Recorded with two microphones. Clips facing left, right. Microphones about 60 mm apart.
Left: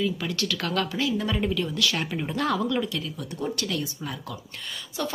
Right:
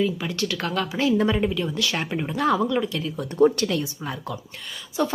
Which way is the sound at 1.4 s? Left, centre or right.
Centre.